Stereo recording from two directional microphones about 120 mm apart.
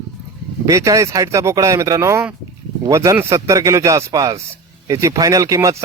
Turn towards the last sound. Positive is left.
turn(degrees=-25)  # may be behind; listen again after turning